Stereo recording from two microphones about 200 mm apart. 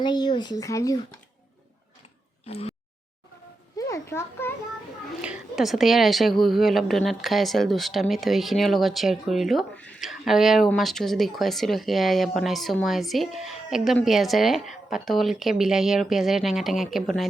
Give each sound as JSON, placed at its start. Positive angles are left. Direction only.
{"t": 0.0, "sound": "speech", "side_deg": 20}
{"t": 2.5, "sound": "a sound", "side_deg": 30}
{"t": 3.8, "sound": "children playing", "side_deg": 15}
{"t": 5.2, "sound": "a woman's voice", "side_deg": -5}